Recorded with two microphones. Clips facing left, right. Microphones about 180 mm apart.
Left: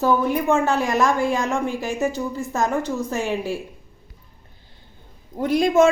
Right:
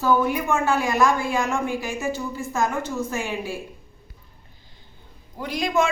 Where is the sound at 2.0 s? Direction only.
40° left (ahead or behind).